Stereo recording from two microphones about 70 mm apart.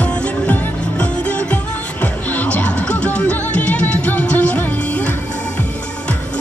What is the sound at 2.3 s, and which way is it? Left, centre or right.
Music, centre.